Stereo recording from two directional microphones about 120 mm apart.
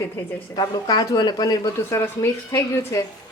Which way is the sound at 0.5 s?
35° left (ahead or behind).